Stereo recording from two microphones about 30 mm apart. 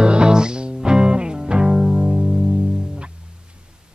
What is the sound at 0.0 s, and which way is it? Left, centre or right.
Music, right.